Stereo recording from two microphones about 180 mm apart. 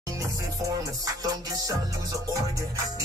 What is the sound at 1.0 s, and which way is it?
Music, 20° right (ahead or behind).